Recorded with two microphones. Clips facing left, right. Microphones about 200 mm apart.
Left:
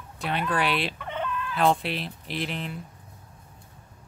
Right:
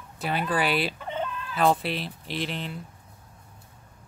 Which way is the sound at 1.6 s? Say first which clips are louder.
Right 1 dB; centre (ahead or behind).